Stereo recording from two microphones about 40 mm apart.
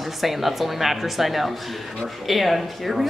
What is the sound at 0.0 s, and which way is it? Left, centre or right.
Speech, centre.